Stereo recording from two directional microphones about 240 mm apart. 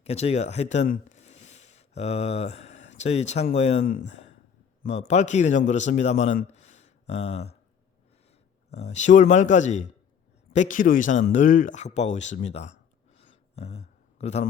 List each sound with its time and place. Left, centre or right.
0.0 s a man's voice: left
8.7 s speech: left
13.1 s a sound: left